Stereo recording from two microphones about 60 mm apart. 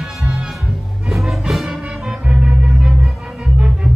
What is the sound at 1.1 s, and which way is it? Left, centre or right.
Music, centre.